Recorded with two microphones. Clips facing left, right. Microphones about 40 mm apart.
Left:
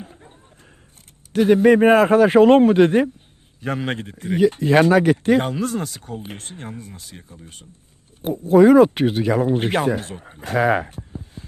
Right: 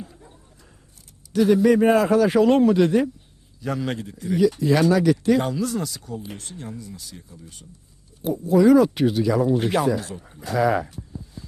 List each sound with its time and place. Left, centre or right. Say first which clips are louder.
0.0 s basketball bounce: even; left
1.3 s a man's voice: left 3 dB; left